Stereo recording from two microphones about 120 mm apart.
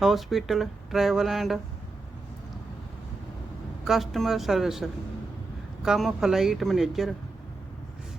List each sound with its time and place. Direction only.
0.0 s speech: centre (ahead or behind)
3.8 s speech: centre (ahead or behind)